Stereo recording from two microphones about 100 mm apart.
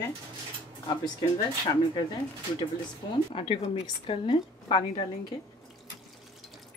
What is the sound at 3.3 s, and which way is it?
A woman's voice, 65° left (ahead or behind).